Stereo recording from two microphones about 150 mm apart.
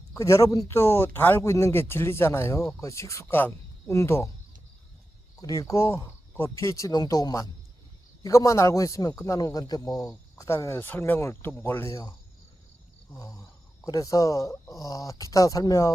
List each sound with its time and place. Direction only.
0.1 s a man's voice: 20° left (ahead or behind)
5.4 s a man's voice: 25° left (ahead or behind)
13.1 s a man's voice: 25° left (ahead or behind)